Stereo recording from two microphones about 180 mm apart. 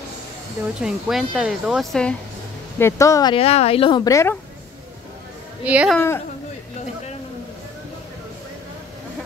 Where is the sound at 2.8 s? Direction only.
15° left (ahead or behind).